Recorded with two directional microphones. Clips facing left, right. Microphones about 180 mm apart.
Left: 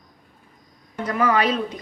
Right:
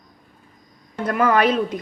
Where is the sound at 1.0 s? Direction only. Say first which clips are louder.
Right 3 dB; 50° right (ahead or behind).